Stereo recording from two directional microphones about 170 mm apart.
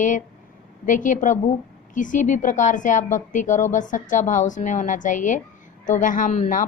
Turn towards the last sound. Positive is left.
turn(degrees=45)  # may be behind; listen again after turning